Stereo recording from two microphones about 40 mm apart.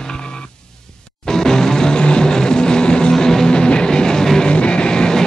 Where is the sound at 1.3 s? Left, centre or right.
Centre.